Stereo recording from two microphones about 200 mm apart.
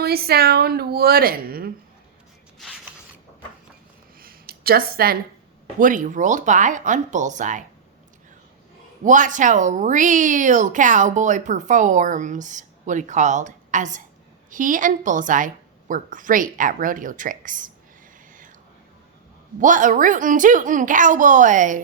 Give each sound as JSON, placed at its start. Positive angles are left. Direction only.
{"t": 0.0, "sound": "a woman's voice", "side_deg": -50}
{"t": 4.2, "sound": "a sound", "side_deg": -50}
{"t": 5.8, "sound": "speech", "side_deg": -40}
{"t": 9.0, "sound": "speech", "side_deg": -40}
{"t": 19.5, "sound": "speech", "side_deg": -40}